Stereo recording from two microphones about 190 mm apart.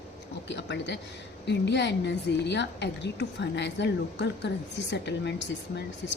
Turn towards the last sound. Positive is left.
turn(degrees=65)  # may be behind; listen again after turning